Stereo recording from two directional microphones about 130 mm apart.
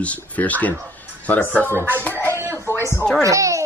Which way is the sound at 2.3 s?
20° right (ahead or behind).